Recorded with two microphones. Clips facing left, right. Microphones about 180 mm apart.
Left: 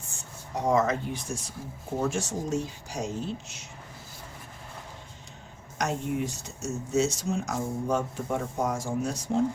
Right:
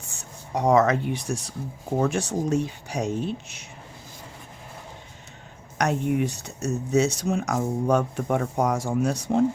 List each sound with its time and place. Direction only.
0.2 s speech: 70° right (ahead or behind)
5.7 s speech: 65° right (ahead or behind)